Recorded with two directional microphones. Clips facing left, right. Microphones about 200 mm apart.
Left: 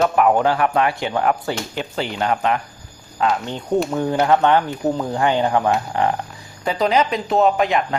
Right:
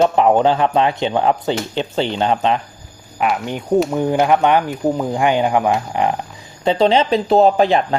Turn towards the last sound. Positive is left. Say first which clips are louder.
# right 4 dB
turn(degrees=-30)  # may be behind; listen again after turning